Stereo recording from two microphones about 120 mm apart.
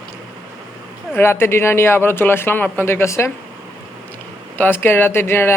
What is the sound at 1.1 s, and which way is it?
Speech, 20° left (ahead or behind).